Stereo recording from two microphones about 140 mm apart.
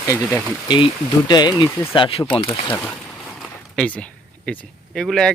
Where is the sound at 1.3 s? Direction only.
30° left (ahead or behind).